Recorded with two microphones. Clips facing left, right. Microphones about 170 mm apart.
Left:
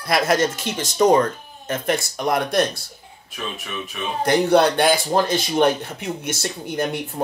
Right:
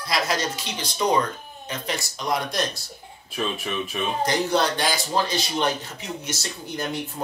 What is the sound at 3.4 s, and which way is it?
Speech, 35° right (ahead or behind).